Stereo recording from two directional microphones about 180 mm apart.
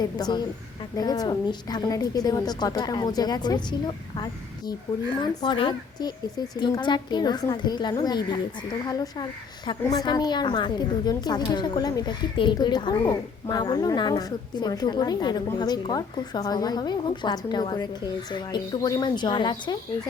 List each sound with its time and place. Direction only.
0.0 s a woman's voice: 25° left (ahead or behind)